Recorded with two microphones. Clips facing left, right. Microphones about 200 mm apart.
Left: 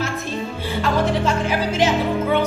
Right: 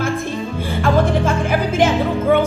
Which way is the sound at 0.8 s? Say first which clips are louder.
Right 3 dB; 50° right (ahead or behind).